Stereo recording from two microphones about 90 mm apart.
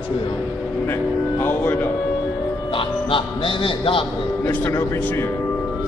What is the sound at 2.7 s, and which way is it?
Speech, 75° left (ahead or behind).